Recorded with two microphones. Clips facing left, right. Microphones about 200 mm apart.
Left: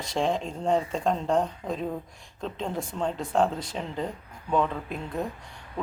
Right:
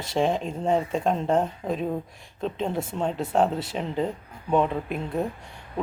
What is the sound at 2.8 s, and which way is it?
Speech, 25° right (ahead or behind).